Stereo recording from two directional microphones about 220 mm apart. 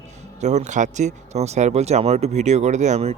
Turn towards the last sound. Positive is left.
turn(degrees=-30)  # may be behind; listen again after turning